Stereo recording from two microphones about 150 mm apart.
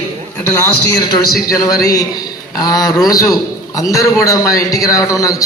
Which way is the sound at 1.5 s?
25° left (ahead or behind).